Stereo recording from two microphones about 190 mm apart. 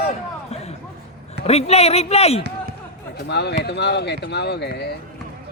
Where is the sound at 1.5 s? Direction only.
35° left (ahead or behind).